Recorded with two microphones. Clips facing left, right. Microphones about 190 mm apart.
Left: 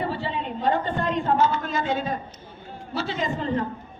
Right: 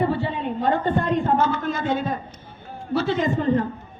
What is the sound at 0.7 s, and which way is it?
A man's voice, 55° right (ahead or behind).